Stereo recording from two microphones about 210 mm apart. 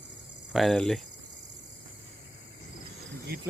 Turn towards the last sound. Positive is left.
turn(degrees=-45)  # may be behind; listen again after turning